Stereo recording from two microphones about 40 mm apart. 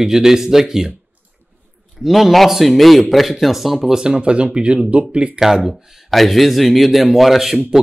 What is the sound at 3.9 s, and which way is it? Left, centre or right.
Speech, right.